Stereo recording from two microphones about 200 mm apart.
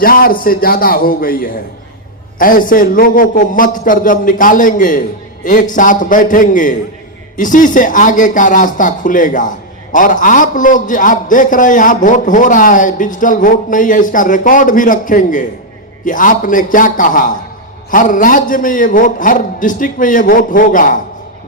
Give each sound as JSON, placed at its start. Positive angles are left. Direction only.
{"t": 0.0, "sound": "a man's voice", "side_deg": 45}